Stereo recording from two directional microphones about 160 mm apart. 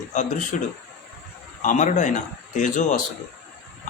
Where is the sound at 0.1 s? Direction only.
50° left (ahead or behind).